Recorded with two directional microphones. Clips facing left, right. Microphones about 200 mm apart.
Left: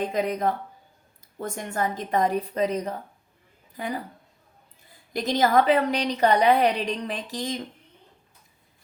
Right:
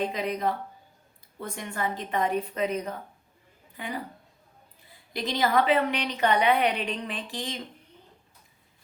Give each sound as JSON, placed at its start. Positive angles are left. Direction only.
{"t": 0.1, "sound": "a woman's voice", "side_deg": 45}
{"t": 5.1, "sound": "a woman's voice", "side_deg": 45}